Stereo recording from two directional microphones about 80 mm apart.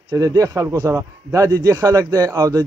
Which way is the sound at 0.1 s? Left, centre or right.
Right.